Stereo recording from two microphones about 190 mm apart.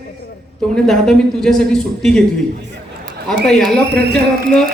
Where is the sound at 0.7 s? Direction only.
5° left (ahead or behind).